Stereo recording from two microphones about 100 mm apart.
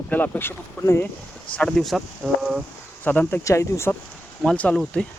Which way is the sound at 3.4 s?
30° left (ahead or behind).